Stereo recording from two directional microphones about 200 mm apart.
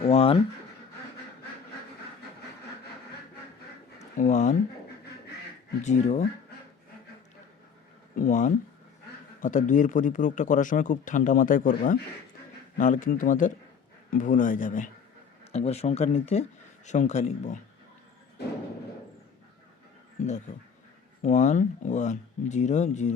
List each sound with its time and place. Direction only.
0.0 s speech: 30° left (ahead or behind)
3.9 s a sound: 35° left (ahead or behind)
5.8 s speech: 35° left (ahead or behind)
8.1 s speech: 40° left (ahead or behind)
20.2 s speech: 35° left (ahead or behind)